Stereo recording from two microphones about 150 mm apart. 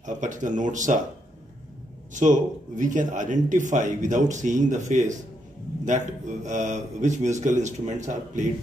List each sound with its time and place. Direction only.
0.0 s speech: 60° right (ahead or behind)
2.1 s a man's voice: 55° right (ahead or behind)